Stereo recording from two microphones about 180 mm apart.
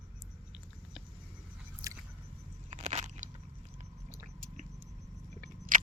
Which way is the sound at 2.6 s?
40° right (ahead or behind).